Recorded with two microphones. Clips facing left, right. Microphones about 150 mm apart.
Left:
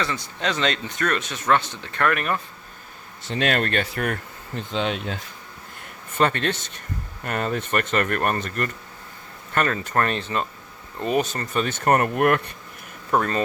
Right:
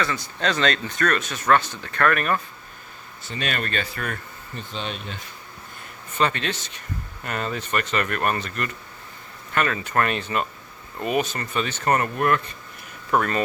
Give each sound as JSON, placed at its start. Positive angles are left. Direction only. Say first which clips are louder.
{"t": 0.0, "sound": "speech", "louder": "right 1 dB", "side_deg": 20}
{"t": 3.2, "sound": "speech", "louder": "left 6 dB", "side_deg": 90}
{"t": 6.1, "sound": "speech", "louder": "left 2 dB", "side_deg": 50}
{"t": 11.0, "sound": "speech", "louder": "left 1 dB", "side_deg": -5}
{"t": 11.3, "sound": "speech", "louder": "left 2 dB", "side_deg": 40}
{"t": 13.1, "sound": "speech", "louder": "even", "side_deg": 25}